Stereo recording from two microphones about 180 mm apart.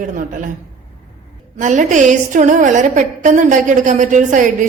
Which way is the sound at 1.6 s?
45° right (ahead or behind).